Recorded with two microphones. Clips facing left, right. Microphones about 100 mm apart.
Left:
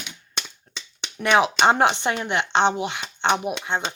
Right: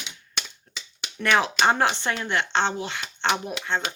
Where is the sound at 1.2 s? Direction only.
20° left (ahead or behind).